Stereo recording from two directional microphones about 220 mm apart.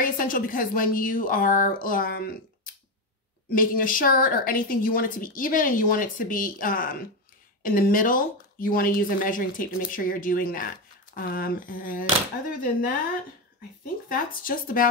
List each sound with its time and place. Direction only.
0.0 s a woman's voice: 40° left (ahead or behind)
14.0 s a woman's voice: 40° left (ahead or behind)